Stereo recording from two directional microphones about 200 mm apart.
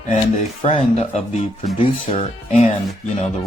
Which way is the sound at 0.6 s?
30° left (ahead or behind).